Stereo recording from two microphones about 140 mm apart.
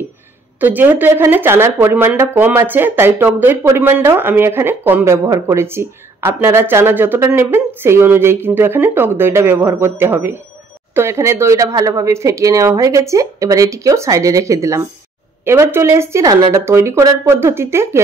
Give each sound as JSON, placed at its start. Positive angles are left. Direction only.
{"t": 0.6, "sound": "speech", "side_deg": -15}